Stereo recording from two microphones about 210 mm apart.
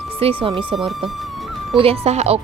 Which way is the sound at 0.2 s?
30° right (ahead or behind).